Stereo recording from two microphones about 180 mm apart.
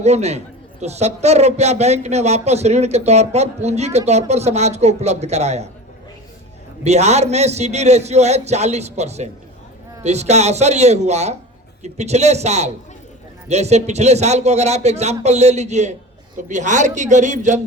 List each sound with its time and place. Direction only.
0.0 s a man's voice: 40° right (ahead or behind)
6.8 s a man's voice: 40° right (ahead or behind)